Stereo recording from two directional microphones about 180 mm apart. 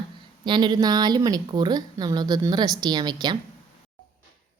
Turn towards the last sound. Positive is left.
turn(degrees=-25)  # may be behind; listen again after turning